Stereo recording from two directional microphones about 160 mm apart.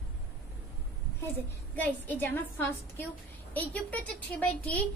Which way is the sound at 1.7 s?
10° left (ahead or behind).